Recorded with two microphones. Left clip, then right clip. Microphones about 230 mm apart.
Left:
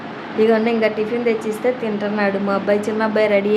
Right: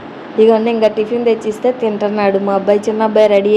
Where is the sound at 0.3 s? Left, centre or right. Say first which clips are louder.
Right 5 dB; centre.